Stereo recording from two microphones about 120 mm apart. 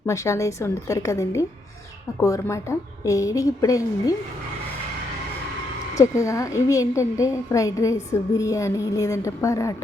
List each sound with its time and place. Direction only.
0.0 s a woman's voice: 25° left (ahead or behind)
5.9 s a woman's voice: 25° left (ahead or behind)